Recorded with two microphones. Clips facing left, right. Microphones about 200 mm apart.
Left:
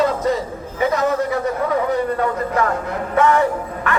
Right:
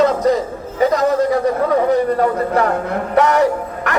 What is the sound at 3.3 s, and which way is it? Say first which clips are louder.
Music: right 3 dB; 75° right (ahead or behind).